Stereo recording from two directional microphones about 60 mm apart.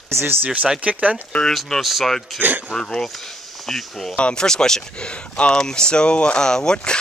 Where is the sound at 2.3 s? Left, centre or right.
Right.